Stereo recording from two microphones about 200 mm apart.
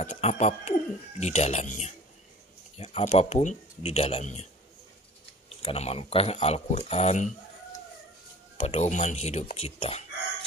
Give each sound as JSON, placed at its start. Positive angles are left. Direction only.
{"t": 0.0, "sound": "speech", "side_deg": 35}
{"t": 5.6, "sound": "speech", "side_deg": 30}
{"t": 8.5, "sound": "speech", "side_deg": 35}